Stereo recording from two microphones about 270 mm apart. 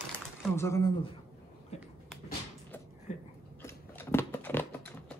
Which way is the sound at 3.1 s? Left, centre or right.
Left.